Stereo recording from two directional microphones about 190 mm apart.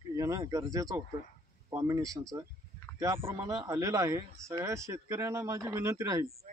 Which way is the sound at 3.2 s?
15° right (ahead or behind).